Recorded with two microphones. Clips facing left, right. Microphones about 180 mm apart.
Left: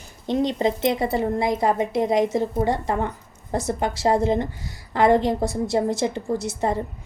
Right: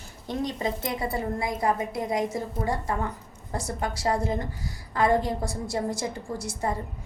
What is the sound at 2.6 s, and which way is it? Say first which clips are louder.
A woman's voice: left 5 dB; 25° left (ahead or behind).